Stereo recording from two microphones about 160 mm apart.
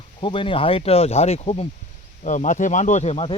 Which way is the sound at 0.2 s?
30° left (ahead or behind).